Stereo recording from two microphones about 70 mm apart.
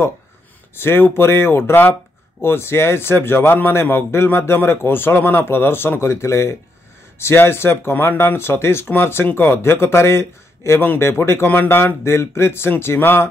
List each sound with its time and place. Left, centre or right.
0.7 s a man's voice: left